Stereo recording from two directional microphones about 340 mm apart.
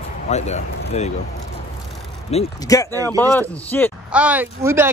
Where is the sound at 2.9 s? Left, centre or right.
Centre.